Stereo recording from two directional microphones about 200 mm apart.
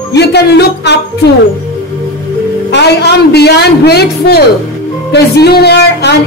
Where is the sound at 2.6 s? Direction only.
55° left (ahead or behind).